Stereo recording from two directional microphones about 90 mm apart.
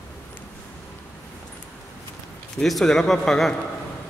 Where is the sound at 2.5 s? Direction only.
5° left (ahead or behind).